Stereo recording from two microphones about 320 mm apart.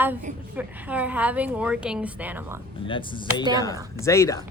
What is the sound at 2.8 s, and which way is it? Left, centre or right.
Speech, centre.